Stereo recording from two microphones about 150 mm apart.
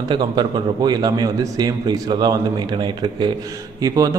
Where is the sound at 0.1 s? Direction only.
30° right (ahead or behind).